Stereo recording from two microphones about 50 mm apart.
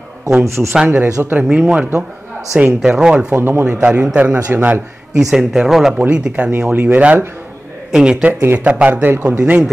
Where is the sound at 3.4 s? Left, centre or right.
Right.